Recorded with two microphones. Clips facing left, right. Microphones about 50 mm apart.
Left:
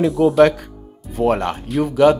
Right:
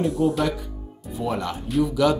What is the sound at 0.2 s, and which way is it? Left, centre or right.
Speech, left.